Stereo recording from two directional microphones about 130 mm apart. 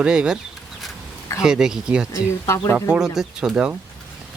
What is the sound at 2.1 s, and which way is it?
Speech, 20° left (ahead or behind).